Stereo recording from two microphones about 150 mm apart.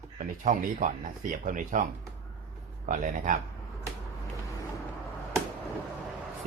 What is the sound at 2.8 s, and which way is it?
Speech, 65° right (ahead or behind).